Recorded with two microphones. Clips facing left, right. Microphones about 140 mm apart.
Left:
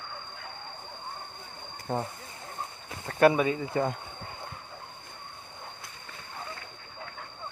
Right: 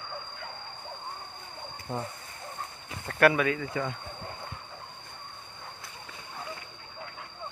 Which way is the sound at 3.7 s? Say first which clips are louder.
Left 4 dB; 40° left (ahead or behind).